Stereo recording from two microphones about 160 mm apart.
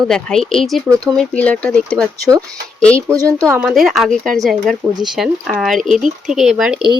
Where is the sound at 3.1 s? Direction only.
20° right (ahead or behind).